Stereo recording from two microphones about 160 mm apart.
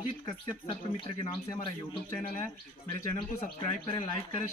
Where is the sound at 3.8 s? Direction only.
35° left (ahead or behind).